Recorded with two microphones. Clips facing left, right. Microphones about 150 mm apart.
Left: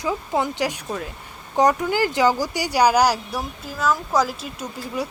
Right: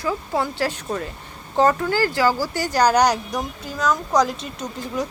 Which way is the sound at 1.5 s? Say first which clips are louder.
Even; 15° left (ahead or behind).